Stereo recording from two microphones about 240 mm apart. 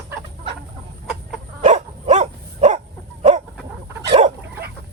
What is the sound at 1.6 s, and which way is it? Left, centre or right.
Dog, right.